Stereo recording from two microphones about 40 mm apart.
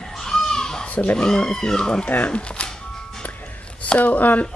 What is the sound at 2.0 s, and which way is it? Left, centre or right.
Speech, left.